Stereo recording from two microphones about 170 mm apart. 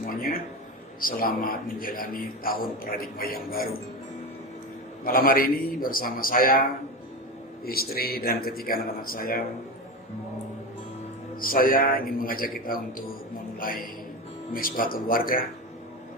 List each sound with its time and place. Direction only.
0.0 s a sound: 55° left (ahead or behind)
1.0 s a man's voice: 55° left (ahead or behind)
5.0 s a man's voice: 60° left (ahead or behind)
11.3 s a man's voice: 55° left (ahead or behind)